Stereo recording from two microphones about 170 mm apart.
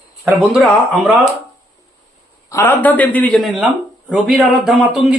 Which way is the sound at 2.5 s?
15° left (ahead or behind).